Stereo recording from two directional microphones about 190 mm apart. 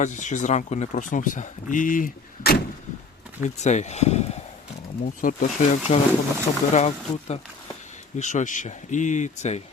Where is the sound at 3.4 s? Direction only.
40° left (ahead or behind).